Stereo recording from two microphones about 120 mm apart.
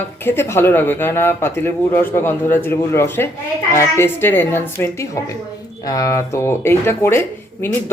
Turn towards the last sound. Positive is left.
turn(degrees=20)  # may be behind; listen again after turning